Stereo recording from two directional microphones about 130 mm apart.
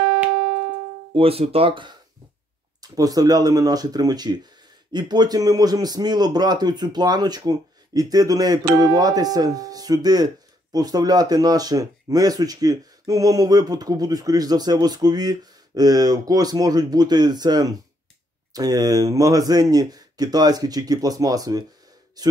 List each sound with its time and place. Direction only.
1.1 s speech: 45° right (ahead or behind)
2.8 s a man's voice: 30° right (ahead or behind)